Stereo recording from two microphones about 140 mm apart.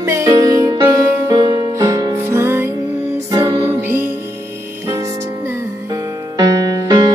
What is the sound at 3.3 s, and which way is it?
Music, 30° right (ahead or behind).